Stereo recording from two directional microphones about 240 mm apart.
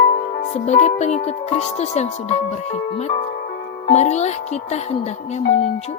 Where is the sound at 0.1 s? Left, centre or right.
Left.